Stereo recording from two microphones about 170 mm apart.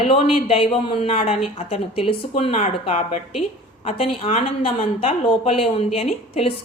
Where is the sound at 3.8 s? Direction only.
35° left (ahead or behind).